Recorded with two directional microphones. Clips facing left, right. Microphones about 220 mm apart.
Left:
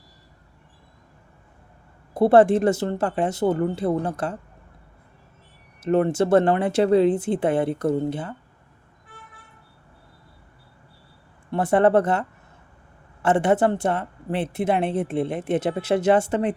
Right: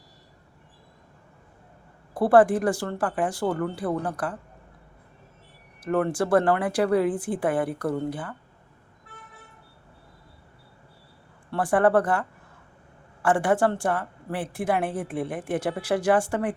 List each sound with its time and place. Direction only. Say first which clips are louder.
2.1 s a woman's voice: left 3 dB; 25° left (ahead or behind)
5.8 s a woman's voice: left 4 dB; 25° left (ahead or behind)
11.5 s a woman's voice: left 3 dB; 25° left (ahead or behind)
13.2 s a woman's voice: left 3 dB; 20° left (ahead or behind)